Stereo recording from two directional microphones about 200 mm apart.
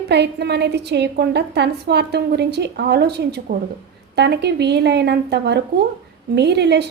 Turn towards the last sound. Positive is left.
turn(degrees=-55)  # may be behind; listen again after turning